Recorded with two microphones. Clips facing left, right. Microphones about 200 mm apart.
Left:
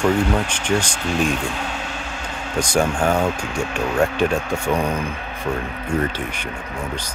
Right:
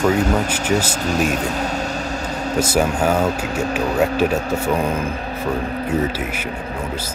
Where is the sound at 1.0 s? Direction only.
40° right (ahead or behind).